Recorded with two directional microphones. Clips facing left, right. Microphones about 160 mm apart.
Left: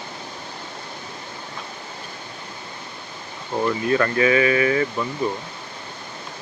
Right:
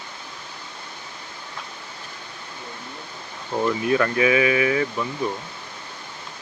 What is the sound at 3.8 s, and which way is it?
Speech, 5° right (ahead or behind).